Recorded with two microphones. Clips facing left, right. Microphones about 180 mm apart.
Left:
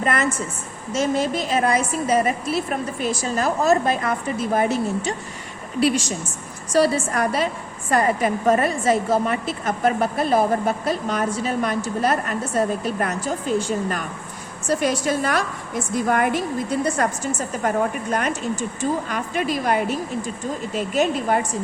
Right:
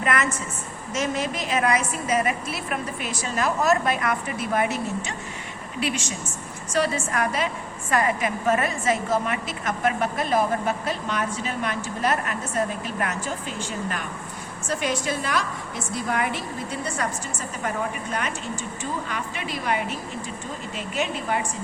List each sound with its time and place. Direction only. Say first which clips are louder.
0.0 s a woman's voice: left 3 dB; 30° left (ahead or behind)